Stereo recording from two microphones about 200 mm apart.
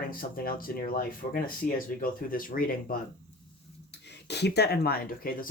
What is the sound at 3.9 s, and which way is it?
Speech, 55° left (ahead or behind).